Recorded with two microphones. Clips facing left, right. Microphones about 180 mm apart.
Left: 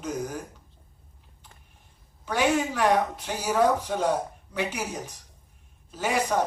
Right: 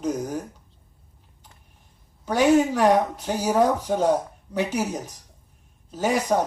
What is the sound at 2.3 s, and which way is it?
A man's voice, 40° right (ahead or behind).